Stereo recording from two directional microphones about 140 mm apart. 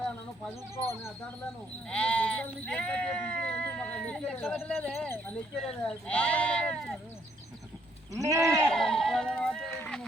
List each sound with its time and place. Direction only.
1.9 s speech: 10° left (ahead or behind)
4.5 s a man's voice: centre (ahead or behind)
5.0 s speech: 15° left (ahead or behind)
8.1 s sheep: 25° right (ahead or behind)
8.4 s sheep: 5° left (ahead or behind)